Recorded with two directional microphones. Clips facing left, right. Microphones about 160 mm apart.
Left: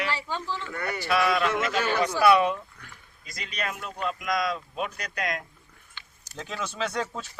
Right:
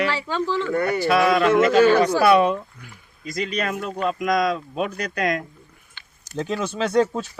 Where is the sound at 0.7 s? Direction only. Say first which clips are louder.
Right 7 dB; 35° right (ahead or behind).